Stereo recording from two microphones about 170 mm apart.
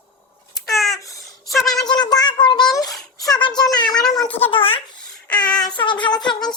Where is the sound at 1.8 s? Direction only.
25° left (ahead or behind).